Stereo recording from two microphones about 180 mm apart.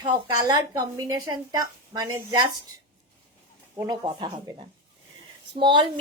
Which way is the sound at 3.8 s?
20° right (ahead or behind).